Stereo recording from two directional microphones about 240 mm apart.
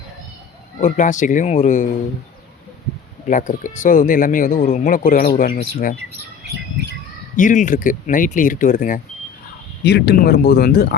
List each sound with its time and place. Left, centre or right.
0.8 s speech: left
3.2 s speech: left
7.3 s speech: left